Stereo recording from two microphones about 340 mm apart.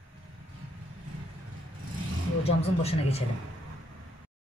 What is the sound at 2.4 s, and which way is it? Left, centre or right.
Speech, centre.